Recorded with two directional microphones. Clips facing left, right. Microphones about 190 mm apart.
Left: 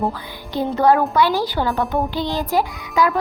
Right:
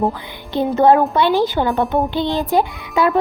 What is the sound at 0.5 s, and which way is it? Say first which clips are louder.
A woman's voice: right 3 dB; 25° right (ahead or behind).